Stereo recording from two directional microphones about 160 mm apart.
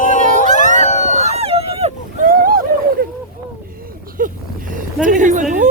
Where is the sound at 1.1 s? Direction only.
40° right (ahead or behind).